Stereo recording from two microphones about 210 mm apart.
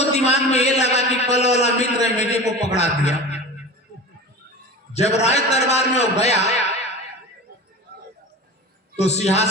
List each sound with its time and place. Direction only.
0.0 s a man's voice: 30° left (ahead or behind)
4.9 s a man's voice: 30° left (ahead or behind)
9.0 s a man's voice: 30° left (ahead or behind)